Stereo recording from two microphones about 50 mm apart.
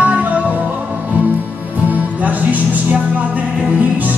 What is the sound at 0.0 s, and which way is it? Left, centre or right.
Music, right.